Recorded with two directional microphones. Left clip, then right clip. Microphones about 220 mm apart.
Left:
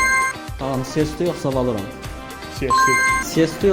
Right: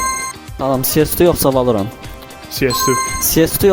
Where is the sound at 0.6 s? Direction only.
50° right (ahead or behind).